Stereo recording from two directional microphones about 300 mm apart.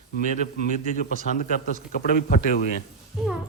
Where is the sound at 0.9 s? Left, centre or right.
Left.